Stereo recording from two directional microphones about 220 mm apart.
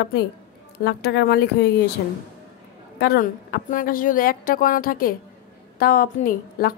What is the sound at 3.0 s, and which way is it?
Speech, 45° left (ahead or behind).